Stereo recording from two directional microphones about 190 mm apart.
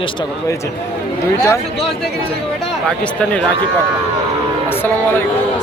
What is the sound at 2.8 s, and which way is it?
Speech, 5° left (ahead or behind).